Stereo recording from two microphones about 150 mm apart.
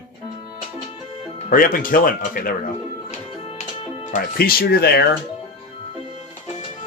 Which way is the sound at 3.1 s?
50° left (ahead or behind).